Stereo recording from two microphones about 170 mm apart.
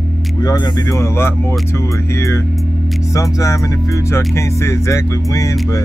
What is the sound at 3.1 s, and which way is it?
Speech, 20° left (ahead or behind).